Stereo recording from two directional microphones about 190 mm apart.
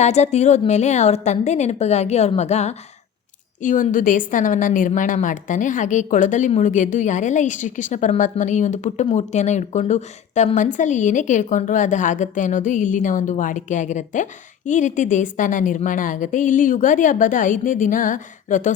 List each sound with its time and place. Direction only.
0.0 s a woman's voice: 35° left (ahead or behind)